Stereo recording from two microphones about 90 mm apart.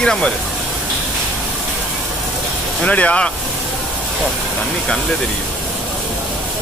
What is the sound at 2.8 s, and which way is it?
Speech, 15° left (ahead or behind).